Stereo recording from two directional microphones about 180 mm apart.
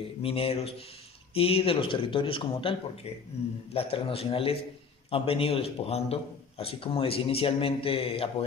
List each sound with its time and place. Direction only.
0.2 s a man's voice: 30° left (ahead or behind)
3.7 s a man's voice: 30° left (ahead or behind)